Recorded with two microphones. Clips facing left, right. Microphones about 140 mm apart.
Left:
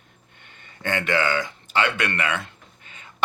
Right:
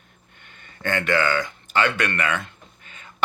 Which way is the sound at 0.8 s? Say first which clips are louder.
Right 1 dB; 20° left (ahead or behind).